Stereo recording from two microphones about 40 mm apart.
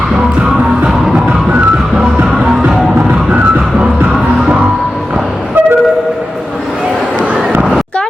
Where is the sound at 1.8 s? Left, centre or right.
Centre.